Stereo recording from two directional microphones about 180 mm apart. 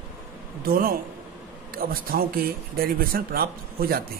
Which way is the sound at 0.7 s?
55° right (ahead or behind).